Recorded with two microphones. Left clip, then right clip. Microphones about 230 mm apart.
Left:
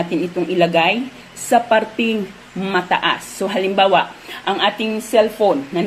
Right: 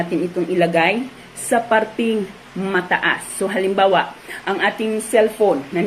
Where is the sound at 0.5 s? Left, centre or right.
Left.